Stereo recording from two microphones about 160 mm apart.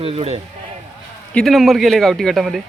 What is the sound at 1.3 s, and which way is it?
Speech, centre (ahead or behind).